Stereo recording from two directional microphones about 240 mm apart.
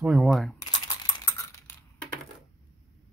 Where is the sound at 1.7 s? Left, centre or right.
Centre.